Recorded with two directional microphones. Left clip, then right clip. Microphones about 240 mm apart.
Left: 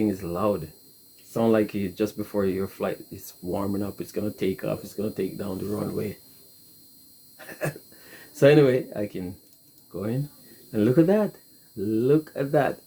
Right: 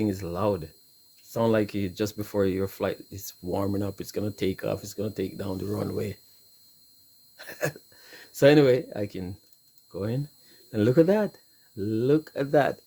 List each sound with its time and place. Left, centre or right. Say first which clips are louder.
0.0 s speech: left 2 dB; right
7.3 s speech: right 1 dB; right
10.7 s speech: left 1 dB; right